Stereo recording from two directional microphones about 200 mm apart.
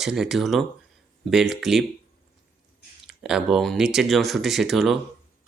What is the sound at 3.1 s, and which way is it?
Speech, 5° right (ahead or behind).